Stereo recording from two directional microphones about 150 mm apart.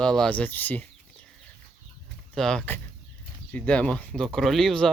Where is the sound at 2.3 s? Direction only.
5° left (ahead or behind).